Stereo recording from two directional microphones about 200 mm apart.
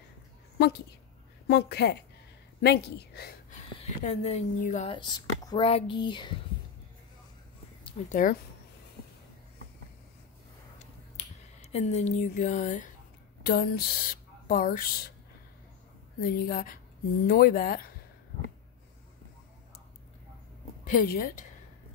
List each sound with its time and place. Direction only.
1.5 s speech: 55° left (ahead or behind)
4.0 s a woman's voice: 30° left (ahead or behind)
4.9 s speech: 25° left (ahead or behind)
8.1 s speech: 40° left (ahead or behind)
11.7 s a woman's voice: 35° left (ahead or behind)
16.2 s speech: 45° left (ahead or behind)
20.8 s speech: 45° left (ahead or behind)